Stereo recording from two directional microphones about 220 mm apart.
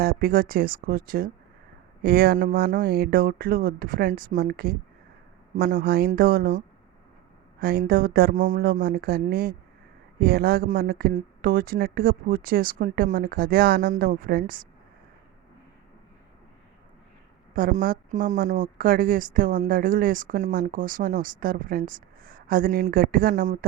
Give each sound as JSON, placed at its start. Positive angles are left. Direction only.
{"t": 0.0, "sound": "a woman's voice", "side_deg": -40}
{"t": 7.6, "sound": "a woman's voice", "side_deg": -40}
{"t": 17.5, "sound": "a woman's voice", "side_deg": -40}